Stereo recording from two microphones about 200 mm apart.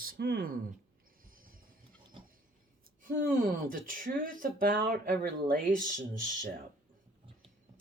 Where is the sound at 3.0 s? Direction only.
45° right (ahead or behind).